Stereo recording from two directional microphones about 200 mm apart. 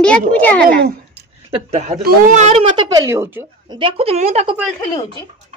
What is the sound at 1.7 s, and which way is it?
Speech, 35° right (ahead or behind).